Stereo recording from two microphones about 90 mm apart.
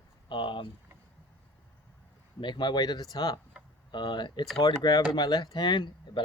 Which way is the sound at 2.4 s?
60° left (ahead or behind).